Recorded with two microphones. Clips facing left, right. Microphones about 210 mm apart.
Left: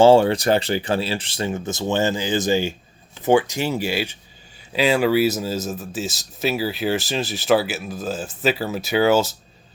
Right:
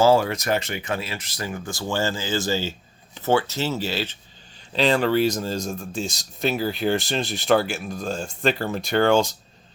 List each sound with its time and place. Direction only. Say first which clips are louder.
0.0 s speech: left 5 dB; 30° left (ahead or behind); by 9.3 s 5° left (ahead or behind)